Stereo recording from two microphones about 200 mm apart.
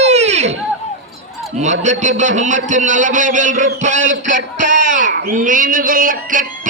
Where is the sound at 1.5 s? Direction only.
35° right (ahead or behind).